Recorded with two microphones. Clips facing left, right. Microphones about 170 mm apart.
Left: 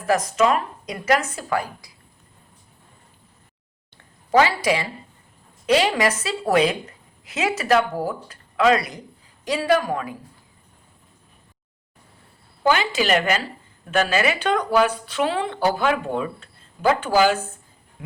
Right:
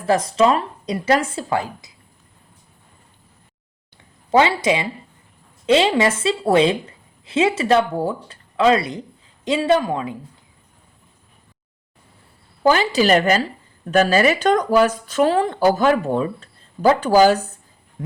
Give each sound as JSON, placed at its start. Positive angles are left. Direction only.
{"t": 0.0, "sound": "speech", "side_deg": -30}
{"t": 4.3, "sound": "speech", "side_deg": -25}
{"t": 12.6, "sound": "speech", "side_deg": -35}